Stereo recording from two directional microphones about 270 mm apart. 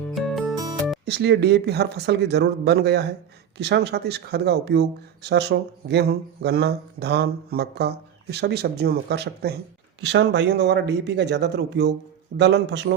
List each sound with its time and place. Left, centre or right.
0.1 s music: centre
1.0 s speech: right